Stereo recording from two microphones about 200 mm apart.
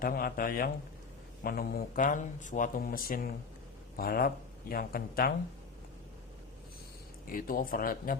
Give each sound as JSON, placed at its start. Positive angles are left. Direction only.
{"t": 0.0, "sound": "speech", "side_deg": 50}
{"t": 7.3, "sound": "speech", "side_deg": 45}